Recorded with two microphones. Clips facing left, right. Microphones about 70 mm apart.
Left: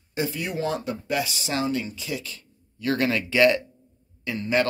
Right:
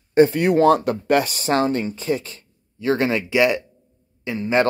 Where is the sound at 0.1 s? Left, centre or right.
Right.